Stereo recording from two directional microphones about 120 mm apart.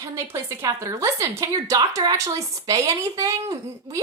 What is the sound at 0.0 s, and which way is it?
Speech, 20° right (ahead or behind).